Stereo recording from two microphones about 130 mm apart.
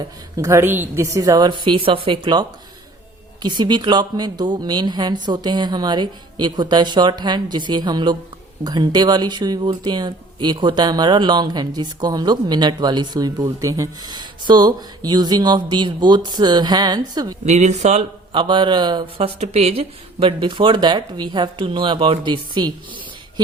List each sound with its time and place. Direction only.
0.3 s a woman's voice: 20° right (ahead or behind)
17.4 s speech: 60° right (ahead or behind)
18.3 s speech: 40° right (ahead or behind)